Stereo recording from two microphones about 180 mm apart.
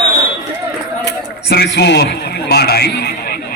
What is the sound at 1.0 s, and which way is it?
A man's voice, 65° left (ahead or behind).